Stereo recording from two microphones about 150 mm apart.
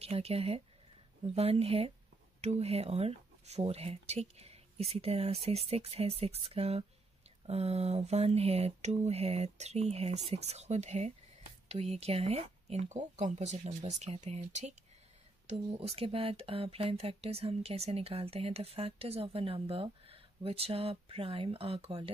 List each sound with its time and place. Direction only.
0.0 s speech: 40° right (ahead or behind)